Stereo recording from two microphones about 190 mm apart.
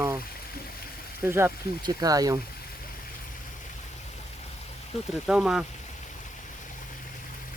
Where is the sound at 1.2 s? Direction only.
15° right (ahead or behind).